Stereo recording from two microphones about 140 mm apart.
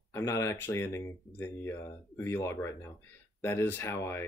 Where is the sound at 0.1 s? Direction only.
20° left (ahead or behind).